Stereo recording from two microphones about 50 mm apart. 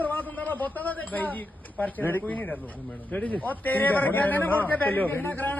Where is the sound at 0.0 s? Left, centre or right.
Left.